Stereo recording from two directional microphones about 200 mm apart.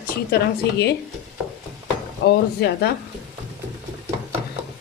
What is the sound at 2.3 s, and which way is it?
Speech, 55° left (ahead or behind).